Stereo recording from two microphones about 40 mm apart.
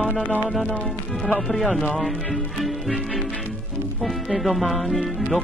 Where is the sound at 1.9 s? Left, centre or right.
Centre.